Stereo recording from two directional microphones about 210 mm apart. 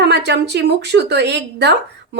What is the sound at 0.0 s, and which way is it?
A woman's voice, 50° right (ahead or behind).